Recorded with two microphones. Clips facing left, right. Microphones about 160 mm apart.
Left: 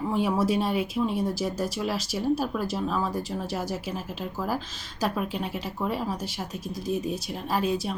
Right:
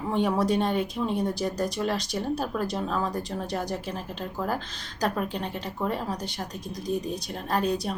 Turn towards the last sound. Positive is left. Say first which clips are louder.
# even
turn(degrees=0)  # may be behind; listen again after turning